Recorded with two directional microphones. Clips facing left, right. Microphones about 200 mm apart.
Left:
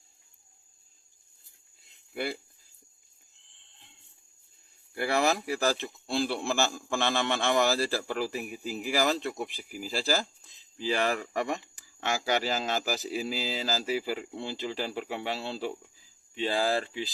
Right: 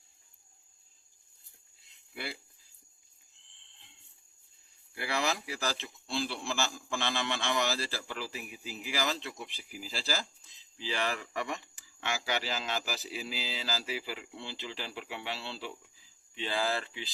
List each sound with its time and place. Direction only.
2.1 s speech: 50° left (ahead or behind)
4.9 s a man's voice: 50° left (ahead or behind)